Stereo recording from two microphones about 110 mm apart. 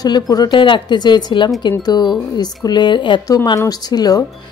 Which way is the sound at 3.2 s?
35° left (ahead or behind).